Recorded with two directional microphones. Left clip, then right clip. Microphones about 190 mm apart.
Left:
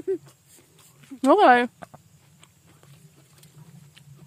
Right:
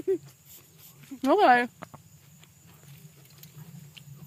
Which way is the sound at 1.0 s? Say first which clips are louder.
Left 5 dB; 50° left (ahead or behind).